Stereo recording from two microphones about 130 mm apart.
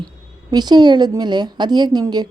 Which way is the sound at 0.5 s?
35° right (ahead or behind).